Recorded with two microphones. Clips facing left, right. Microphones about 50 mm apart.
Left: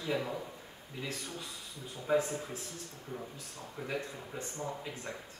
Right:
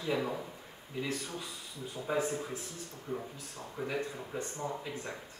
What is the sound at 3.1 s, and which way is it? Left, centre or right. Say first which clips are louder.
Speech: right 5 dB; centre.